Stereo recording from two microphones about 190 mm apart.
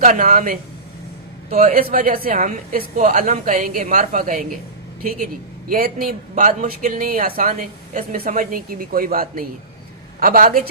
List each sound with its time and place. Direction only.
0.0 s a woman's voice: 40° right (ahead or behind)